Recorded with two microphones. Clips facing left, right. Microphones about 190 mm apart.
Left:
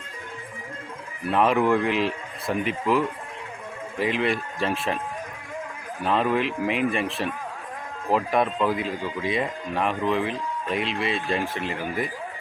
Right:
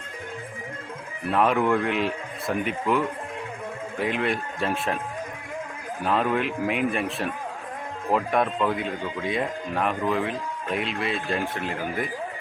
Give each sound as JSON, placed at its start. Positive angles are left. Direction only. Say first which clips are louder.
{"t": 1.3, "sound": "speech", "louder": "left 1 dB", "side_deg": 0}
{"t": 6.1, "sound": "speech", "louder": "left 1 dB", "side_deg": 0}